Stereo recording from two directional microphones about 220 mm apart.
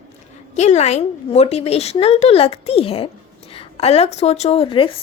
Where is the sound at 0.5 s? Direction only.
30° left (ahead or behind).